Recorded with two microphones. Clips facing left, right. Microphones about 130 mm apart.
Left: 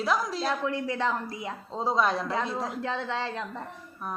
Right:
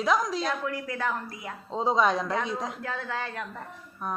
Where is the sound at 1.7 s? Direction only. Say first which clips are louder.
Right 2 dB; centre (ahead or behind).